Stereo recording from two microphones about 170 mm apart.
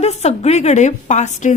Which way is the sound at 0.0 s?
40° left (ahead or behind).